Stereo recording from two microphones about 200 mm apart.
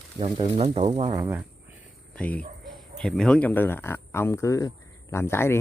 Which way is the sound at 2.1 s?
5° left (ahead or behind).